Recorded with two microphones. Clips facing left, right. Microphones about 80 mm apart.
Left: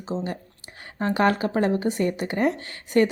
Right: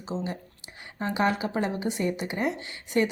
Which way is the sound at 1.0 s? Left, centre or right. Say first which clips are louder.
Left 4 dB; left.